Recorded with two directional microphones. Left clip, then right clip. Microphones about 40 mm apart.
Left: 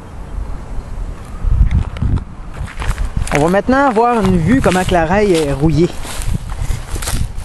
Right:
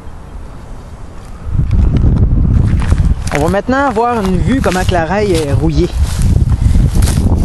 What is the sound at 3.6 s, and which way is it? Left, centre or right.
Speech, left.